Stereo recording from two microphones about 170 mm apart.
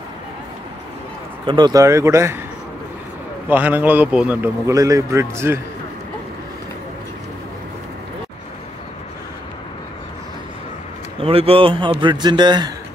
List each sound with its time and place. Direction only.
1.4 s speech: 25° right (ahead or behind)
3.4 s a man's voice: 10° right (ahead or behind)
11.1 s speech: 35° right (ahead or behind)